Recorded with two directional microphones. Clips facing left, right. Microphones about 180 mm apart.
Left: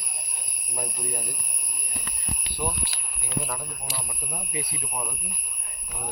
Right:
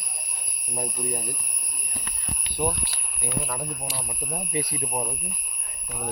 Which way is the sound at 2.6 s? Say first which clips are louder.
Right 5 dB; 30° right (ahead or behind).